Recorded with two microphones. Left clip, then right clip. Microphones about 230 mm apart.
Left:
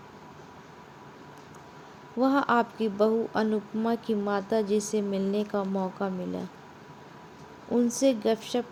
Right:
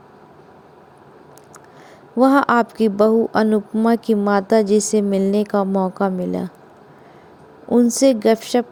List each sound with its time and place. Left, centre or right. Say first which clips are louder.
2.1 s speech: right 10 dB; right
7.7 s speech: right 10 dB; right